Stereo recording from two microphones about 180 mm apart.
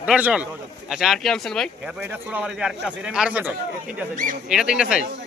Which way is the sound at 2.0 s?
10° right (ahead or behind).